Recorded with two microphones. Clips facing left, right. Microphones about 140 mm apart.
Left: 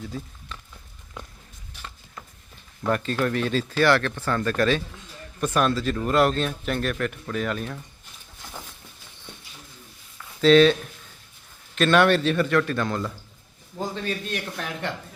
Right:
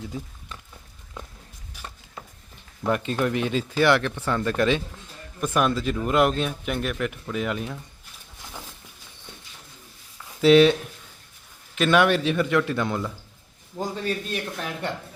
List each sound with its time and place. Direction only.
2.8 s speech: 15° right (ahead or behind)
10.4 s speech: 15° right (ahead or behind)